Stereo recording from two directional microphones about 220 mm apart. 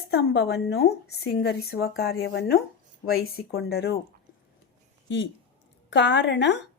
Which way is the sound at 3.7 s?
45° left (ahead or behind).